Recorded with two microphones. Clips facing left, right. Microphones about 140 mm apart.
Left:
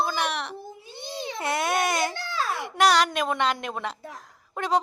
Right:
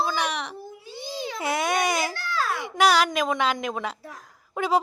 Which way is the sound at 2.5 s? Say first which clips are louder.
Even; centre (ahead or behind).